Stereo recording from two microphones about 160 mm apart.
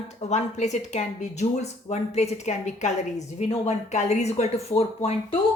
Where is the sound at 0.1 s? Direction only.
45° left (ahead or behind).